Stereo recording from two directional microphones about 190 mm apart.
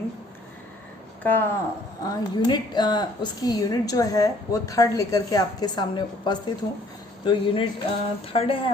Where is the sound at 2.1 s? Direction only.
20° left (ahead or behind).